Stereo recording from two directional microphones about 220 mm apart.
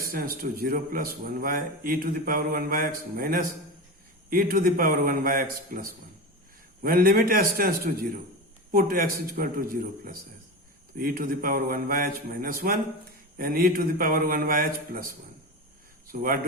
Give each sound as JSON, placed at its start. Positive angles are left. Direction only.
{"t": 0.0, "sound": "speech", "side_deg": -40}